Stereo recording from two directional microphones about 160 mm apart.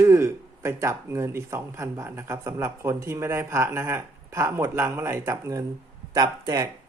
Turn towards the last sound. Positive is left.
turn(degrees=-25)  # may be behind; listen again after turning